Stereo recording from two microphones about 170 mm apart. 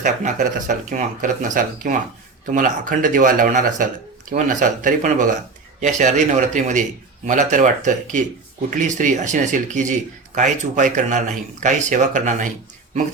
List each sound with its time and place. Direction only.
0.0 s speech: 50° right (ahead or behind)